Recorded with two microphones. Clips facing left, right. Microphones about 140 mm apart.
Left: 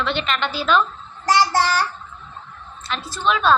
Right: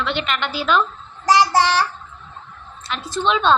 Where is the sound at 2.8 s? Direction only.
15° right (ahead or behind).